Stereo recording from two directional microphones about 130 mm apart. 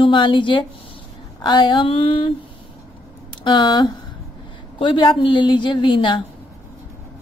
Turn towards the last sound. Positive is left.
turn(degrees=40)  # may be behind; listen again after turning